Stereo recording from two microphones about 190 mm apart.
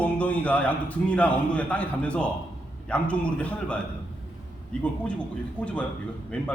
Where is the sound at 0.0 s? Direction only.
5° left (ahead or behind).